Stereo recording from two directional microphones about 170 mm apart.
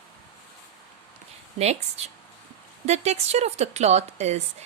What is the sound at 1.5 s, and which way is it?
A woman's voice, 40° right (ahead or behind).